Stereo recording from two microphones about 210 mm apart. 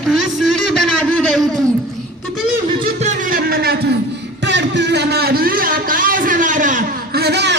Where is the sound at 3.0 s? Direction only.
40° right (ahead or behind).